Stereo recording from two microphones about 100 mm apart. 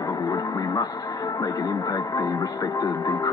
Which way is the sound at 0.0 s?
40° left (ahead or behind).